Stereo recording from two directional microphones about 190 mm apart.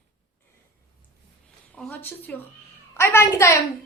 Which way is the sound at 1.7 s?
5° left (ahead or behind).